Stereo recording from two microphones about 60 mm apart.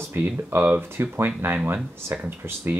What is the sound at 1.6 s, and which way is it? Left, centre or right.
Speech, right.